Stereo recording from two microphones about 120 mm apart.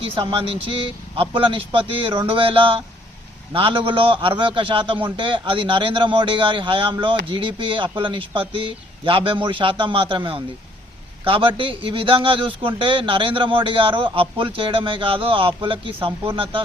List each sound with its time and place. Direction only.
0.0 s a man's voice: 50° right (ahead or behind)